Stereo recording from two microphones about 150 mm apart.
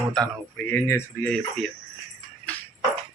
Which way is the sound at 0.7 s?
15° left (ahead or behind).